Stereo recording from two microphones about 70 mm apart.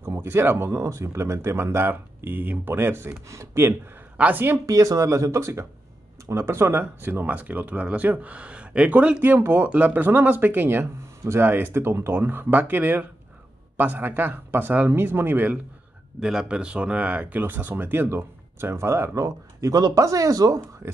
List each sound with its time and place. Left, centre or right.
0.1 s speech: right
4.2 s speech: right
4.6 s speech: right; by 9.4 s centre
9.4 s speech: right
9.7 s speech: right
16.2 s speech: centre; by 20.6 s right
20.8 s speech: right